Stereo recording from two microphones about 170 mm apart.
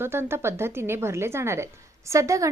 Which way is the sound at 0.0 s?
15° right (ahead or behind).